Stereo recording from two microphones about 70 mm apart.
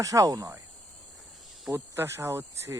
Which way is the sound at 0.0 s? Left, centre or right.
Right.